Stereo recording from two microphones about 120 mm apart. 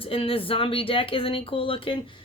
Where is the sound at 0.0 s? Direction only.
50° left (ahead or behind).